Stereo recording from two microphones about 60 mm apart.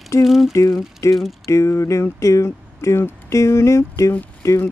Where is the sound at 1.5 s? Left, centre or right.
Left.